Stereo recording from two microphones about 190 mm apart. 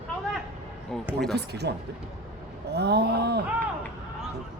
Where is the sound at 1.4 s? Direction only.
60° right (ahead or behind).